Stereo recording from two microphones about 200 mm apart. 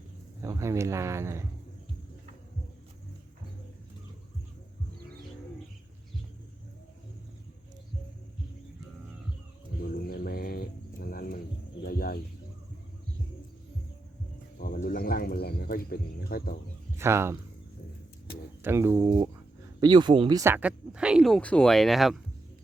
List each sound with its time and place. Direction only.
0.4 s speech: 15° right (ahead or behind)
9.9 s a sound: 50° left (ahead or behind)
11.8 s bird: 50° left (ahead or behind)
14.6 s a sound: 45° left (ahead or behind)
17.0 s speech: 15° right (ahead or behind)
18.6 s speech: 10° right (ahead or behind)